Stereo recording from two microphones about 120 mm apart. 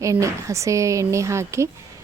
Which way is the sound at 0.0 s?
25° right (ahead or behind).